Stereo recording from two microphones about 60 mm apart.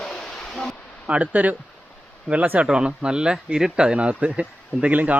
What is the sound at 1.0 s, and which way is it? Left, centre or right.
Speech, centre.